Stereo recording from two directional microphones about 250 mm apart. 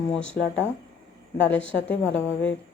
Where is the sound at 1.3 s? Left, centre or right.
Centre.